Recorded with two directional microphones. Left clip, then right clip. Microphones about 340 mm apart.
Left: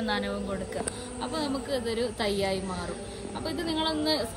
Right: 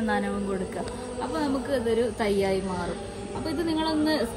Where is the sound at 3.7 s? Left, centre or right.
Left.